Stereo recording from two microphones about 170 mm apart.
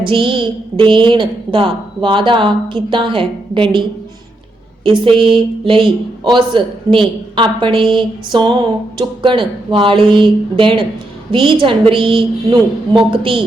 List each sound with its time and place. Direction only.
0.0 s a woman's voice: 30° right (ahead or behind)